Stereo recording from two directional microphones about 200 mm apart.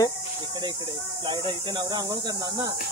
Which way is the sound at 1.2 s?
25° right (ahead or behind).